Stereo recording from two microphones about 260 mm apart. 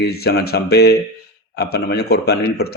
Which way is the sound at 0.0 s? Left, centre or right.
Left.